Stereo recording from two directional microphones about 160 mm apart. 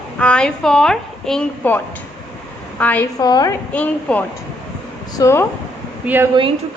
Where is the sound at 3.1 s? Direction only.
25° left (ahead or behind).